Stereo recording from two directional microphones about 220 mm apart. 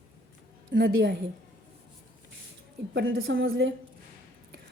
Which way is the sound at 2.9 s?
50° right (ahead or behind).